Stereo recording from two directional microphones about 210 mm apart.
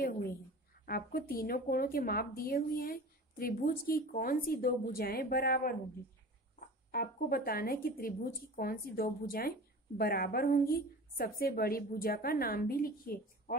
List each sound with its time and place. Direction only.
0.0 s a sound: 45° left (ahead or behind)
0.8 s speech: 45° left (ahead or behind)
6.9 s speech: 45° left (ahead or behind)